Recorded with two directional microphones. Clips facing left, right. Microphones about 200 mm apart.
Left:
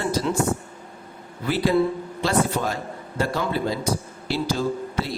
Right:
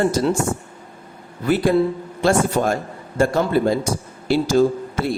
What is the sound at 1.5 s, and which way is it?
Speech, 50° right (ahead or behind).